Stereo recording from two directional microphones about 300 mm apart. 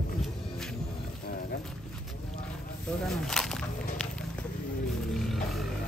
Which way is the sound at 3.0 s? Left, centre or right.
Centre.